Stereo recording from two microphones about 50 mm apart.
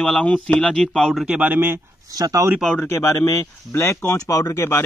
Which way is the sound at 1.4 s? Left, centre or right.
Right.